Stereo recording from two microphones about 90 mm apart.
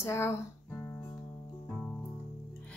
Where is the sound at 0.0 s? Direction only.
30° left (ahead or behind).